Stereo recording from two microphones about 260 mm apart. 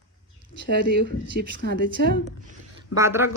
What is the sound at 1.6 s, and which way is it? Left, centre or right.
Speech, right.